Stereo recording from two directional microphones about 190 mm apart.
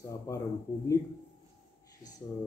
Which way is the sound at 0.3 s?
15° left (ahead or behind).